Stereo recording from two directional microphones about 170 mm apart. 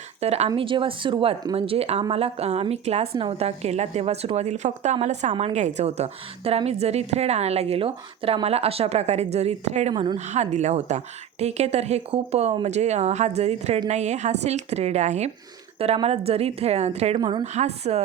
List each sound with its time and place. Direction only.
0.2 s a woman's voice: 35° right (ahead or behind)
9.9 s speech: 25° right (ahead or behind)
10.2 s a woman's voice: 40° right (ahead or behind)
17.2 s speech: 25° right (ahead or behind)
17.4 s a woman's voice: 40° right (ahead or behind)